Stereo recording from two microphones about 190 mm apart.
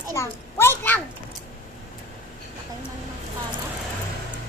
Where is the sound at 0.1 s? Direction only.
15° left (ahead or behind).